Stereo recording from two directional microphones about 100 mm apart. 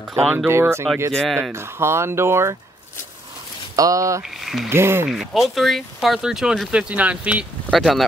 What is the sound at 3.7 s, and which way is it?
Speech, 35° right (ahead or behind).